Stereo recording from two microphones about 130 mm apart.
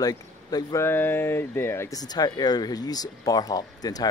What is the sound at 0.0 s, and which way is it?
Speech, 30° left (ahead or behind).